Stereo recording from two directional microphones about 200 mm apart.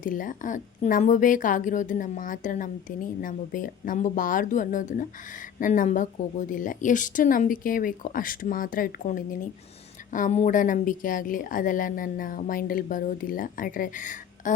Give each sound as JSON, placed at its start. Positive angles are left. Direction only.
{"t": 0.0, "sound": "a woman's voice", "side_deg": 40}